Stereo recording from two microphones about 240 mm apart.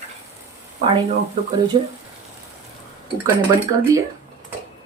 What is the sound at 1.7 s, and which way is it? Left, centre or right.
Speech, right.